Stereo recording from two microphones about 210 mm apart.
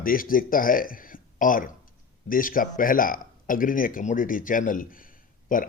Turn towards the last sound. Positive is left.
turn(degrees=40)  # may be behind; listen again after turning